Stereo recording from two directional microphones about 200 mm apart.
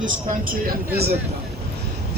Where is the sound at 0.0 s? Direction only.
40° right (ahead or behind).